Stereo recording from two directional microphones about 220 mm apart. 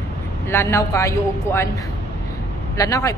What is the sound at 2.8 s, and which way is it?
Speech, 15° left (ahead or behind).